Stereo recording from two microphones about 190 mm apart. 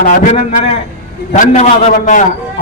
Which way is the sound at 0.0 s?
45° left (ahead or behind).